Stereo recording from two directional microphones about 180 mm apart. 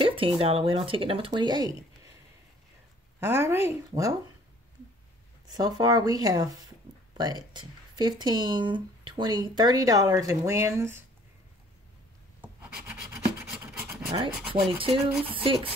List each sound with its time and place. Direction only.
0.0 s speech: 30° right (ahead or behind)
3.2 s speech: 15° right (ahead or behind)
5.5 s speech: 20° right (ahead or behind)
12.4 s a sound: 5° right (ahead or behind)
14.5 s speech: 30° right (ahead or behind)
15.2 s a sound: 30° right (ahead or behind)